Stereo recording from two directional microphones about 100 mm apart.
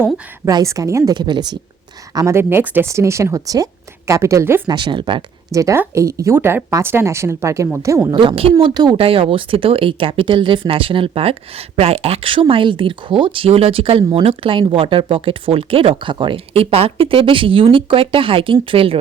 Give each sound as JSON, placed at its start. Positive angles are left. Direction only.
{"t": 0.6, "sound": "a woman's voice", "side_deg": -30}
{"t": 1.1, "sound": "speech", "side_deg": -45}
{"t": 2.1, "sound": "speech", "side_deg": -30}
{"t": 4.7, "sound": "speech", "side_deg": -50}
{"t": 5.5, "sound": "a woman's voice", "side_deg": -35}
{"t": 8.1, "sound": "speech", "side_deg": -55}
{"t": 8.6, "sound": "speech", "side_deg": -45}
{"t": 9.0, "sound": "speech", "side_deg": -70}